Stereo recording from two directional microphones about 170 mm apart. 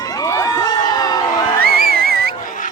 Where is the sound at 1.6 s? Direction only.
65° right (ahead or behind).